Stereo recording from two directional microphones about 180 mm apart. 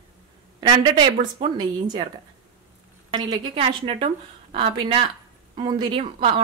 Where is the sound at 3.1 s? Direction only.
30° right (ahead or behind).